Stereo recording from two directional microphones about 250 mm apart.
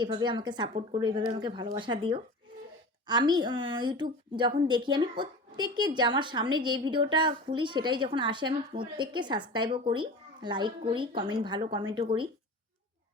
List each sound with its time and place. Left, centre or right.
0.0 s a woman's voice: centre